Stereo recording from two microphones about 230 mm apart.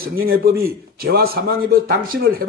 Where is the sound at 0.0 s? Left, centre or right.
Right.